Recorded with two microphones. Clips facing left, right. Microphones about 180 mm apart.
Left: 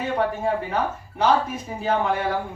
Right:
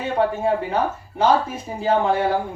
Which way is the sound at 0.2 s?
30° right (ahead or behind).